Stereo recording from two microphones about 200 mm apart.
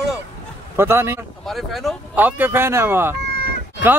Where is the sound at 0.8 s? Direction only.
10° right (ahead or behind).